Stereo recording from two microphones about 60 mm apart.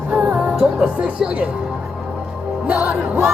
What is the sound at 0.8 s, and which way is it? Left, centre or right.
Speech, centre.